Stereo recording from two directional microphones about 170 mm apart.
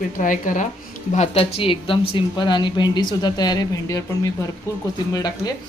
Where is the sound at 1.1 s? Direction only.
35° left (ahead or behind).